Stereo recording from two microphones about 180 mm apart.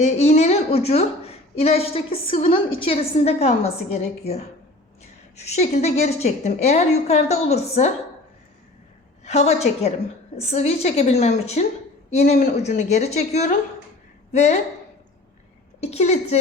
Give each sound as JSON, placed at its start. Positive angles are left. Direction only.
{"t": 0.0, "sound": "a woman's voice", "side_deg": 40}
{"t": 5.4, "sound": "a woman's voice", "side_deg": 35}
{"t": 9.2, "sound": "a woman's voice", "side_deg": 40}
{"t": 15.8, "sound": "a woman's voice", "side_deg": 35}